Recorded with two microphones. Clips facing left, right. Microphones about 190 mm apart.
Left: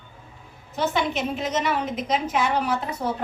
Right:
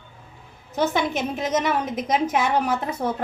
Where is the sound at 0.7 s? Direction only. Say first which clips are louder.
Right 2 dB; 45° right (ahead or behind).